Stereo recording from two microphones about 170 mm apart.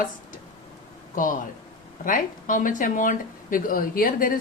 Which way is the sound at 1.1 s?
50° left (ahead or behind).